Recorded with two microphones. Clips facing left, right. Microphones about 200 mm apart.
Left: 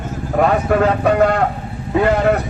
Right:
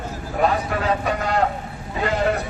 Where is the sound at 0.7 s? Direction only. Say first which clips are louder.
Left 9 dB; 60° left (ahead or behind).